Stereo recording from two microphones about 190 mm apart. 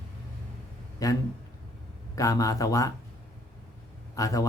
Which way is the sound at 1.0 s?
15° left (ahead or behind).